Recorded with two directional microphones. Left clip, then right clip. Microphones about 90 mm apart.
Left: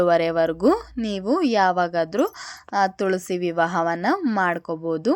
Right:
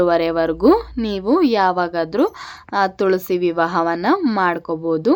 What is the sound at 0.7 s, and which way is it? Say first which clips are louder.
Speech: right 6 dB; 15° left (ahead or behind).